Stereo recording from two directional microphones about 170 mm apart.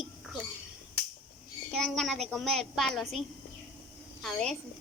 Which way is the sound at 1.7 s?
Centre (ahead or behind).